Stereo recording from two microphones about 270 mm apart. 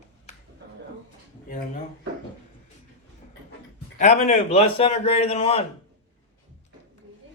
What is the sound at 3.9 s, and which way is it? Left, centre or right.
A man's voice, left.